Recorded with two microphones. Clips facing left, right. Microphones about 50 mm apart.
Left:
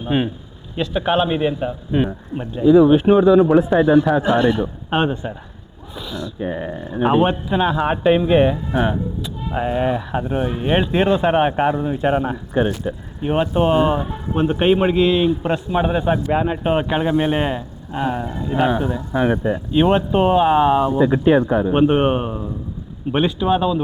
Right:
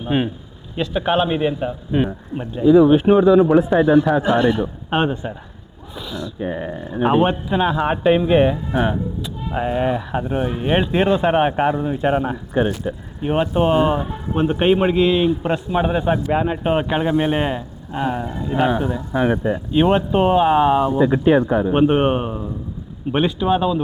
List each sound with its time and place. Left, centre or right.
0.0 s a man's voice: centre